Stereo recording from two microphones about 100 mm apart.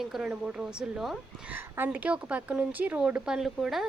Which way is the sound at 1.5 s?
20° right (ahead or behind).